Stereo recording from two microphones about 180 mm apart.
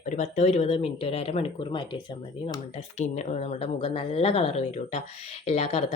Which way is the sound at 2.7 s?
40° left (ahead or behind).